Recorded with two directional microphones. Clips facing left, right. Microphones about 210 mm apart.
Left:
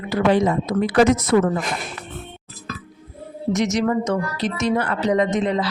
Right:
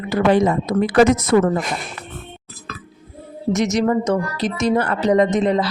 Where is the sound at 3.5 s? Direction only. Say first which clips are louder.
Right 2 dB; 40° right (ahead or behind).